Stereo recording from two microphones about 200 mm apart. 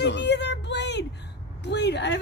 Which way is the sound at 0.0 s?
60° left (ahead or behind).